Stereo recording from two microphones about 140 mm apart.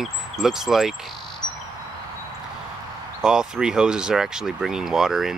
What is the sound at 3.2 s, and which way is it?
Speech, 5° right (ahead or behind).